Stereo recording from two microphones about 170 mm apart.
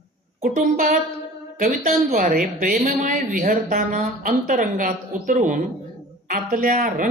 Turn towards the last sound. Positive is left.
turn(degrees=-55)  # may be behind; listen again after turning